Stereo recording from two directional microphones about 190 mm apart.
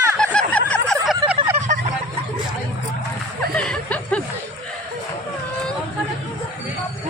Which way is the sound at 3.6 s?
5° left (ahead or behind).